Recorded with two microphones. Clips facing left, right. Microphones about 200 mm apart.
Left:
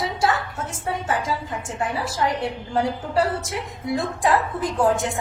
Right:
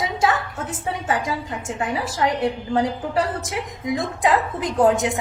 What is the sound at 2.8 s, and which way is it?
A woman's voice, 15° right (ahead or behind).